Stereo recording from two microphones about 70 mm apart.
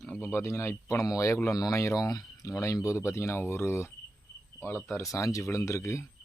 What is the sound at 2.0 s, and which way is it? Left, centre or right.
Speech, left.